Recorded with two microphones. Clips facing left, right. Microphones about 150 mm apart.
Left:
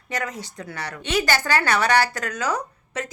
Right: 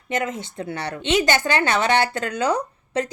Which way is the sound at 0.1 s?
25° right (ahead or behind).